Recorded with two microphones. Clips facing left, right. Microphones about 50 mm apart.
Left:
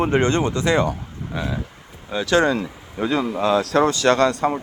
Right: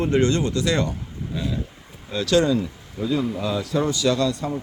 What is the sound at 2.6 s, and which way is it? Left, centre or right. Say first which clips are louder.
Speech: left 2 dB; left.